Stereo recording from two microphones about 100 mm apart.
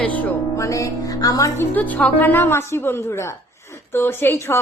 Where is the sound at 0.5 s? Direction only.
35° left (ahead or behind).